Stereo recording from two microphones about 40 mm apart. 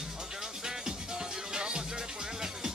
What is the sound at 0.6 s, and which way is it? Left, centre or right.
Music, centre.